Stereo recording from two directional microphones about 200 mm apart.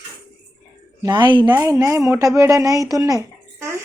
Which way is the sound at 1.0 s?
20° right (ahead or behind).